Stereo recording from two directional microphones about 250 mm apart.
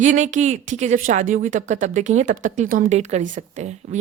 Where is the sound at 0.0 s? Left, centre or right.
Right.